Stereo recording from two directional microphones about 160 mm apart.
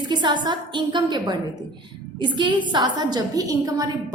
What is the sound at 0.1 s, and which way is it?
A woman's voice, 30° right (ahead or behind).